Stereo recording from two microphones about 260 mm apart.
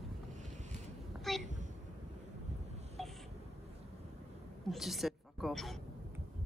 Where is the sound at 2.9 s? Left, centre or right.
Centre.